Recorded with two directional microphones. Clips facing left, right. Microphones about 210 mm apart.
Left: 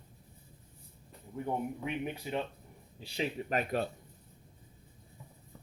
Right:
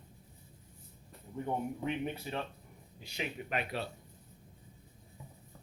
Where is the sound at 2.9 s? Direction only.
30° left (ahead or behind).